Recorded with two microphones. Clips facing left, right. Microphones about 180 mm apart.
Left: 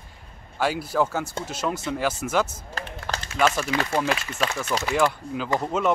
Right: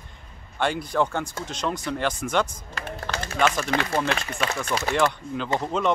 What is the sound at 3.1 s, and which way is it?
Run, 10° left (ahead or behind).